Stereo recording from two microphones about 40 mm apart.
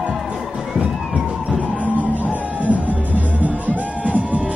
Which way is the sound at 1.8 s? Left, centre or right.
Right.